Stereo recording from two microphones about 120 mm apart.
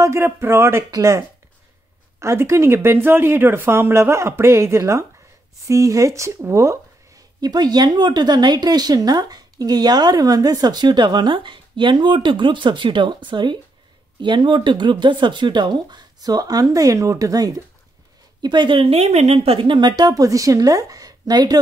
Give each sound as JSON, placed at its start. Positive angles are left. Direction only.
{"t": 0.0, "sound": "speech", "side_deg": -20}
{"t": 18.4, "sound": "speech", "side_deg": -40}